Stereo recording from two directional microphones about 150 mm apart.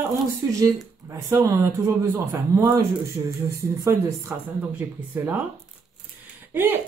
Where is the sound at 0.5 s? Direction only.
20° right (ahead or behind).